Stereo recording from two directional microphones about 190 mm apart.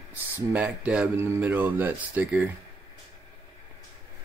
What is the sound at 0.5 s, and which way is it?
Speech, 5° right (ahead or behind).